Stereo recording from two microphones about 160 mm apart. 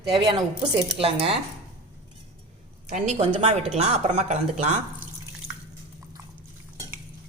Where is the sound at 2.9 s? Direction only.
45° right (ahead or behind).